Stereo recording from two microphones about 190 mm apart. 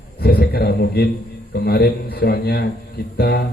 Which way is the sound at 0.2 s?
55° left (ahead or behind).